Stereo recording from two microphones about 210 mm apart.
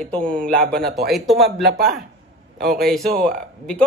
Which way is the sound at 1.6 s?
50° right (ahead or behind).